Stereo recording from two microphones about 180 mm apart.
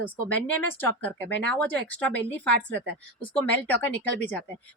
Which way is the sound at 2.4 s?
65° right (ahead or behind).